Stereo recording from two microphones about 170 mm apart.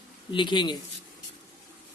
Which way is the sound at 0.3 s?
30° left (ahead or behind).